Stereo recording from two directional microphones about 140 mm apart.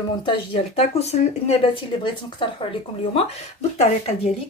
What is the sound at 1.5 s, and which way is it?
Speech, 40° left (ahead or behind).